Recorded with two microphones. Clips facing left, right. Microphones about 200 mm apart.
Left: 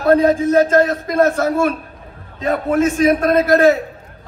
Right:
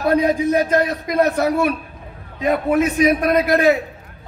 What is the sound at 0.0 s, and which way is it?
A man's voice, 15° right (ahead or behind).